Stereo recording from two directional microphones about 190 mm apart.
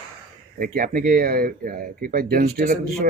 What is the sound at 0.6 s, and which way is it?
Speech, 45° right (ahead or behind).